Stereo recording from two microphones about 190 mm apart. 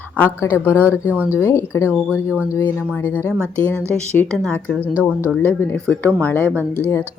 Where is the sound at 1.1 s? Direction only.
10° right (ahead or behind).